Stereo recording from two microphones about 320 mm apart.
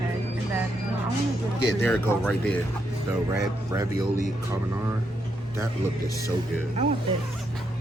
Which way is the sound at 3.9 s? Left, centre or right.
Left.